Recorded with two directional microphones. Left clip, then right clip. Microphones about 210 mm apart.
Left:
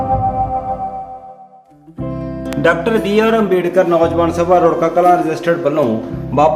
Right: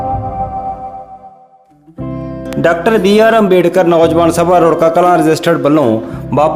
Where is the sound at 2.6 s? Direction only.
50° right (ahead or behind).